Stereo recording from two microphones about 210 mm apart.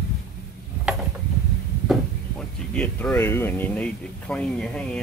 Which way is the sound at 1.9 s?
5° left (ahead or behind).